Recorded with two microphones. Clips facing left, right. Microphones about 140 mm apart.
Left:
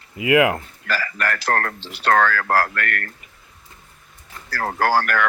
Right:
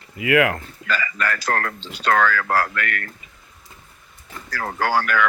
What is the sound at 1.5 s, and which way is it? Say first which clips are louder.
Speech: left 1 dB; 45° left (ahead or behind).